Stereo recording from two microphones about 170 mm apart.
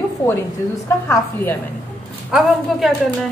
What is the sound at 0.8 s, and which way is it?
Speech, 15° left (ahead or behind).